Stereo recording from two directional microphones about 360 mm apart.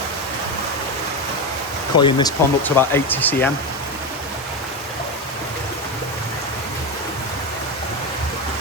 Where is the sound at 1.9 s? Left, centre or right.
Centre.